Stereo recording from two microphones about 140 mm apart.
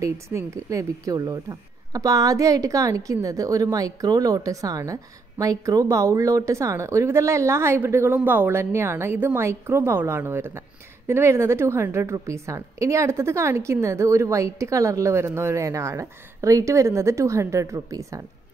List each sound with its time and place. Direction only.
0.0 s speech: 20° right (ahead or behind)